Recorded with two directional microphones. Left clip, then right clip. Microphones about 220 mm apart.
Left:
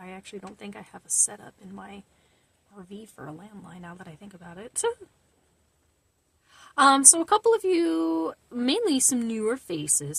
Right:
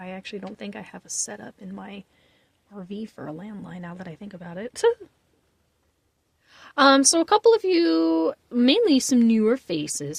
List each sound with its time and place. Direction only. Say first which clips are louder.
0.0 s speech: right 6 dB; 30° right (ahead or behind)
6.5 s speech: right 2 dB; 35° right (ahead or behind)